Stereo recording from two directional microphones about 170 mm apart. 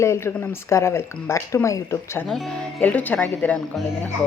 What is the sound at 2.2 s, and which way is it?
Speech, 5° left (ahead or behind).